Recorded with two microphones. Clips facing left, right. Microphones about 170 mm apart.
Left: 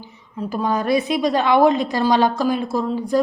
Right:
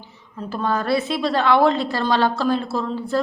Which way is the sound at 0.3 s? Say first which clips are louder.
Left 2 dB; 15° left (ahead or behind).